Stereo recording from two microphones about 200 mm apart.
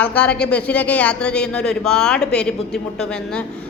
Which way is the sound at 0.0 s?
5° left (ahead or behind).